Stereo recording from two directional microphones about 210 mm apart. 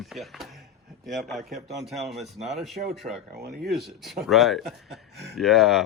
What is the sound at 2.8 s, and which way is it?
Speech, 40° right (ahead or behind).